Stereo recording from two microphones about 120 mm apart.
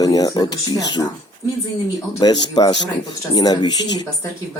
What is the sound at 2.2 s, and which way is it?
Speech, 35° left (ahead or behind).